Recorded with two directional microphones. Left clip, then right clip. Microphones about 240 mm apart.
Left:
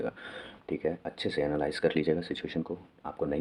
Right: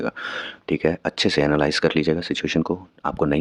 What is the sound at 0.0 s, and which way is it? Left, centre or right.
Speech, right.